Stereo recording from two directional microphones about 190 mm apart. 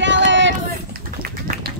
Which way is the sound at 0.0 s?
70° right (ahead or behind).